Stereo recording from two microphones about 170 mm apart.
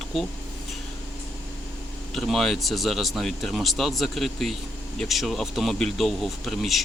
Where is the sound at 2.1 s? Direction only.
Centre (ahead or behind).